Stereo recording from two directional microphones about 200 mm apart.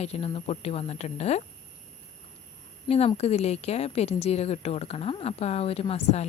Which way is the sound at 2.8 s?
30° left (ahead or behind).